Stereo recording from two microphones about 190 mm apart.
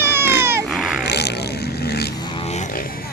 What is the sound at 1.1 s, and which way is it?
Vehicle, 60° left (ahead or behind).